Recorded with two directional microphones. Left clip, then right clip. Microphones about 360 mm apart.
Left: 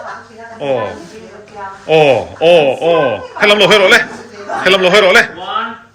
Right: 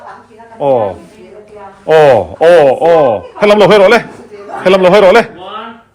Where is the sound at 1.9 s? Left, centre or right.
Centre.